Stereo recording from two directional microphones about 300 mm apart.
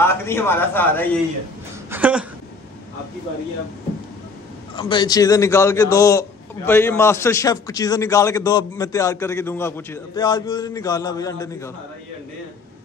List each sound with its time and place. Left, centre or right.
0.0 s a man's voice: centre
1.9 s a sound: centre
4.7 s a man's voice: centre